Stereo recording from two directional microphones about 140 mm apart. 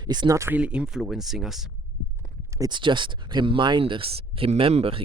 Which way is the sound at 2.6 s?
35° right (ahead or behind).